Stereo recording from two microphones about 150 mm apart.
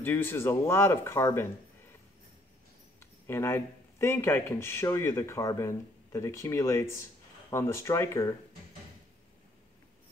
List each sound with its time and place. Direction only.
0.0 s speech: 15° left (ahead or behind)
3.3 s speech: 15° left (ahead or behind)